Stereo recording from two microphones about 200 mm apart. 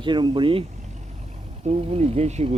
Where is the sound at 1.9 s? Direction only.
30° right (ahead or behind).